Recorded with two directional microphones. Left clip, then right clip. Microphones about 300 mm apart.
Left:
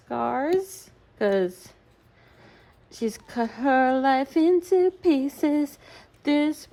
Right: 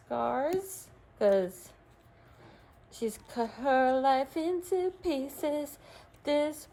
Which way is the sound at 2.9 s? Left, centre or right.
Left.